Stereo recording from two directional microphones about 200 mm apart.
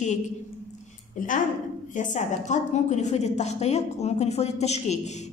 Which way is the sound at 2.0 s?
40° left (ahead or behind).